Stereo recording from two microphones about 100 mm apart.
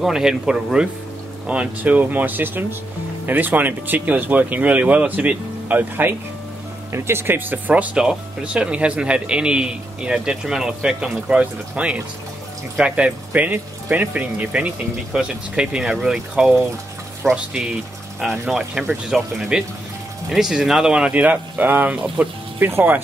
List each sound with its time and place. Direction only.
0.0 s speech: 5° right (ahead or behind)
22.6 s speech: 25° right (ahead or behind)